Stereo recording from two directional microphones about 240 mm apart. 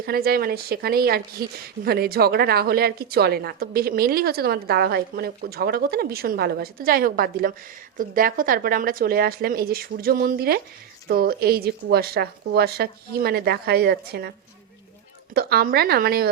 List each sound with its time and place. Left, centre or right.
0.0 s speech: right
15.4 s speech: right